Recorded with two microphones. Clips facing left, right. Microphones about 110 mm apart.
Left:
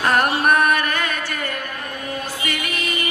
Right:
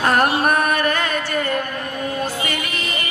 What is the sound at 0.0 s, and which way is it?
Music, 35° right (ahead or behind).